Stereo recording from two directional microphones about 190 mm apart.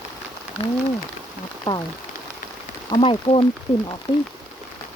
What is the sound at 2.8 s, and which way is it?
Speech, 25° left (ahead or behind).